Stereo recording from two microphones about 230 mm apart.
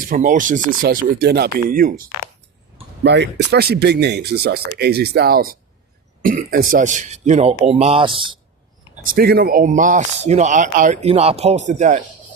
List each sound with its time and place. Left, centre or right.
0.0 s speech: right
3.0 s speech: right
9.0 s speech: right